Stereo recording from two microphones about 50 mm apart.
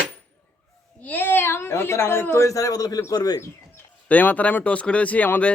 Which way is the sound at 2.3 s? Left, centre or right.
Left.